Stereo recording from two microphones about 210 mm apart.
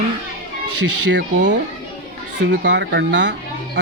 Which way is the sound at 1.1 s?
55° right (ahead or behind).